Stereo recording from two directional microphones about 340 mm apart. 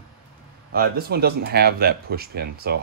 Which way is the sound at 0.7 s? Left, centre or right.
Right.